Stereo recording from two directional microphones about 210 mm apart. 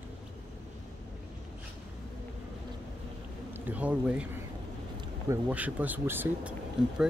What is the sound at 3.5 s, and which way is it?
Speech, 10° right (ahead or behind).